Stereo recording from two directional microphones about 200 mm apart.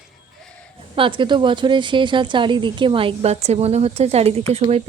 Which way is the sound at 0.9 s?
25° right (ahead or behind).